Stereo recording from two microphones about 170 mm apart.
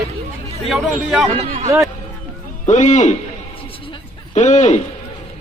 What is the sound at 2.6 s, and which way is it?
Speech, 45° left (ahead or behind).